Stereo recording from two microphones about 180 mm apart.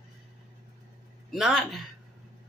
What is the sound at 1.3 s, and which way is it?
Speech, centre (ahead or behind).